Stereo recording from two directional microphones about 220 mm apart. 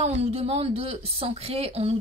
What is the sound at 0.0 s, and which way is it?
A woman's voice, 25° right (ahead or behind).